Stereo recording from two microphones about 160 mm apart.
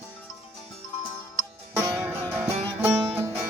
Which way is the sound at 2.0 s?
15° right (ahead or behind).